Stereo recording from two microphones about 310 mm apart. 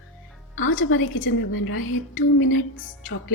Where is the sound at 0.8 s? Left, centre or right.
Left.